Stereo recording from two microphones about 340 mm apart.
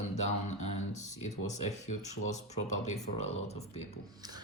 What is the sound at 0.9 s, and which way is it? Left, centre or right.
Speech, left.